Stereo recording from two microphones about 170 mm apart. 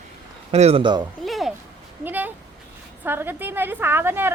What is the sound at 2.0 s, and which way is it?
A woman's voice, 10° right (ahead or behind).